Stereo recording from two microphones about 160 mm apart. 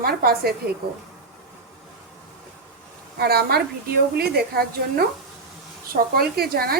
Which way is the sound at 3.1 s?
75° right (ahead or behind).